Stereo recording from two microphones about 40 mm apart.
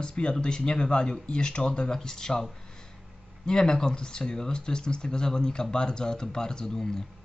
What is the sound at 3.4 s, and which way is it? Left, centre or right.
Speech, centre.